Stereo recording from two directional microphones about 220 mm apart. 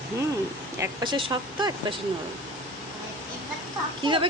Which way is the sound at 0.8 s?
20° right (ahead or behind).